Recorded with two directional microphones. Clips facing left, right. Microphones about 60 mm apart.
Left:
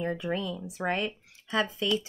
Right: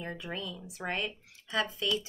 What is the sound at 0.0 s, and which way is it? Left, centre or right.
Speech, left.